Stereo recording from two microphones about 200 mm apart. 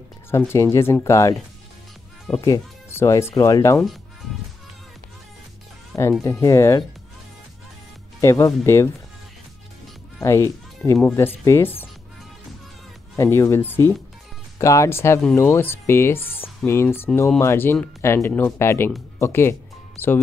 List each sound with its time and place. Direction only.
0.3 s speech: 15° left (ahead or behind)
2.4 s speech: 15° left (ahead or behind)
6.2 s speech: 15° left (ahead or behind)
8.2 s speech: 15° left (ahead or behind)
10.2 s speech: 15° left (ahead or behind)
13.1 s speech: 15° left (ahead or behind)